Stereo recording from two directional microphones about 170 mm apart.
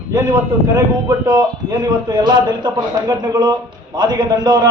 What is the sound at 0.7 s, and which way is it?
A man's voice, 25° right (ahead or behind).